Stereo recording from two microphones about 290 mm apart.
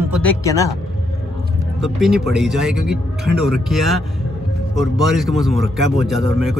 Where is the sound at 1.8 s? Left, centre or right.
Centre.